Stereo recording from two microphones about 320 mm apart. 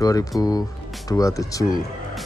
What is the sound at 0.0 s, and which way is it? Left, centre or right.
Speech, centre.